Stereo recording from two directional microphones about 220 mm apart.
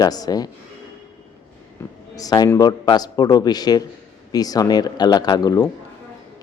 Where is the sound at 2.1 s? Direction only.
15° left (ahead or behind).